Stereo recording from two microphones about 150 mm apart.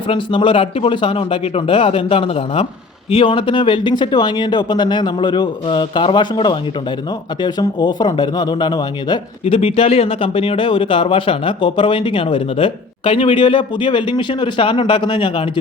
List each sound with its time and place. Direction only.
0.1 s speech: 35° left (ahead or behind)
9.4 s speech: 40° left (ahead or behind)